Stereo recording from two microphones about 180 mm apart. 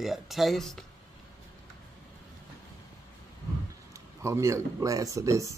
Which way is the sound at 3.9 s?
15° right (ahead or behind).